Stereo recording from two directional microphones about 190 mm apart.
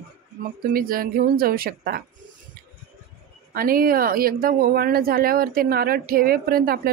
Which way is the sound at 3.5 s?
50° right (ahead or behind).